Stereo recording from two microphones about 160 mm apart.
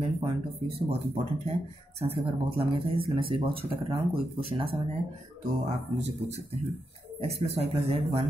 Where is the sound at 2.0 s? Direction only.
35° right (ahead or behind).